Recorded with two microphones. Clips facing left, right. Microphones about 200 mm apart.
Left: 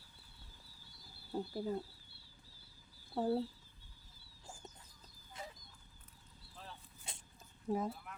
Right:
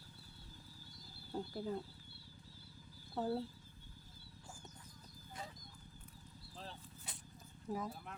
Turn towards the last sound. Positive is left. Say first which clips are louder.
# left 5 dB
turn(degrees=25)  # may be behind; listen again after turning